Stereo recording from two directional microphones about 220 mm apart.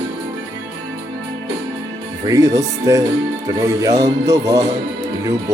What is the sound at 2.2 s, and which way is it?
Music, 15° right (ahead or behind).